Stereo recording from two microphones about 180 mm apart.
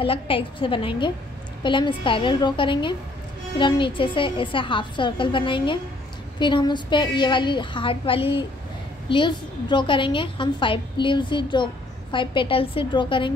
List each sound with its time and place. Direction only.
0.0 s a woman's voice: 30° left (ahead or behind)